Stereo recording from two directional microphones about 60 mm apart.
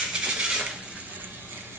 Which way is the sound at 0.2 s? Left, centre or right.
Centre.